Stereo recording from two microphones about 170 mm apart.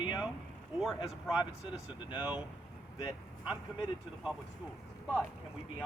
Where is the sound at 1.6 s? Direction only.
30° left (ahead or behind).